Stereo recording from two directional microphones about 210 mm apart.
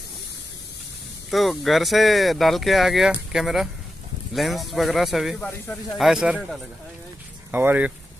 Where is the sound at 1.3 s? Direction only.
Centre (ahead or behind).